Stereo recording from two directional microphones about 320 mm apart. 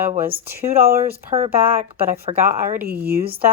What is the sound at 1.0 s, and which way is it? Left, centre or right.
Speech, centre.